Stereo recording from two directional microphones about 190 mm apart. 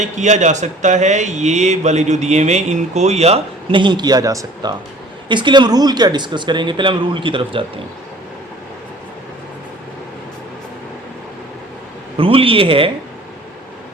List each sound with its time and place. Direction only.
0.0 s a man's voice: 40° right (ahead or behind)
12.1 s speech: 30° right (ahead or behind)